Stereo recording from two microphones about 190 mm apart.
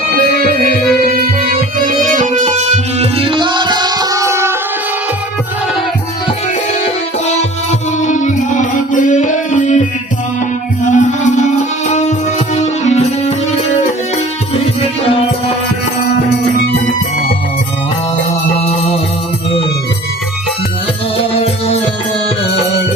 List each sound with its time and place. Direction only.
1.0 s music: 45° right (ahead or behind); by 4.5 s 15° right (ahead or behind)
8.0 s music: 40° left (ahead or behind)
10.9 s music: 40° left (ahead or behind)
21.3 s music: 30° left (ahead or behind)